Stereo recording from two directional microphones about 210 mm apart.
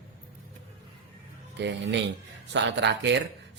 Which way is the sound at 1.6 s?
55° right (ahead or behind).